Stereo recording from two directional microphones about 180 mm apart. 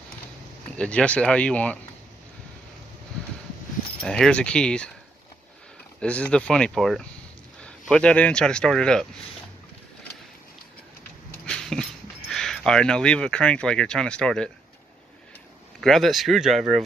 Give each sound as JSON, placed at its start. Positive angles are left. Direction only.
{"t": 0.7, "sound": "speech", "side_deg": 5}
{"t": 4.0, "sound": "speech", "side_deg": 5}
{"t": 5.9, "sound": "speech", "side_deg": 5}
{"t": 11.4, "sound": "speech", "side_deg": 5}
{"t": 15.8, "sound": "speech", "side_deg": 0}